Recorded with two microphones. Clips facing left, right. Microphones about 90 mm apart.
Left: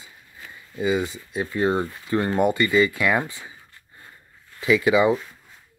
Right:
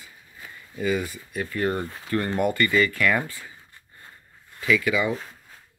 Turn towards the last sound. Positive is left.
turn(degrees=25)  # may be behind; listen again after turning